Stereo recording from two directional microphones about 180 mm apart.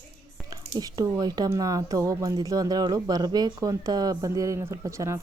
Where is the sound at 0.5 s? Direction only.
20° right (ahead or behind).